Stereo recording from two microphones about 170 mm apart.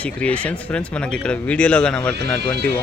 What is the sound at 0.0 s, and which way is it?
A man's voice, 10° left (ahead or behind).